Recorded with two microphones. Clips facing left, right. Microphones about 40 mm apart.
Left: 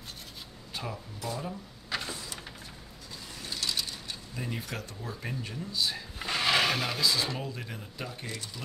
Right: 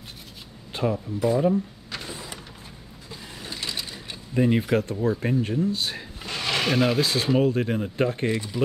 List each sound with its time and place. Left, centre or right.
0.7 s speech: right
1.9 s a sound: centre
3.4 s mechanisms: right
4.4 s speech: right
6.1 s drawer open or close: centre
6.7 s speech: centre
7.0 s speech: right
8.3 s speech: right